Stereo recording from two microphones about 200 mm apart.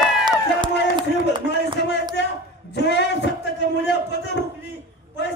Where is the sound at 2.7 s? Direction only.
60° left (ahead or behind).